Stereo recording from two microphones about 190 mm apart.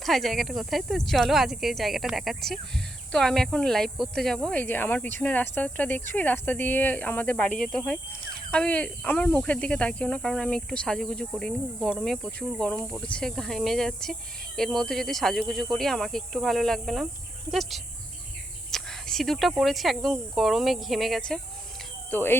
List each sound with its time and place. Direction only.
0.0 s speech: centre (ahead or behind)